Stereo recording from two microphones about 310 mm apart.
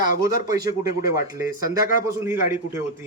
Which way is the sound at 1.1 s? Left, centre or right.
Left.